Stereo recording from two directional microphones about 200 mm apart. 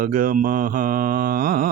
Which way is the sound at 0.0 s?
45° right (ahead or behind).